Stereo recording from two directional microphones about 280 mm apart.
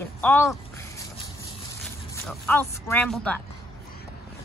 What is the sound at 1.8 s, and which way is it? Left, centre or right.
Speech, centre.